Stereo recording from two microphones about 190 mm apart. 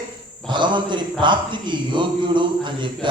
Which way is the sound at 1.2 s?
25° right (ahead or behind).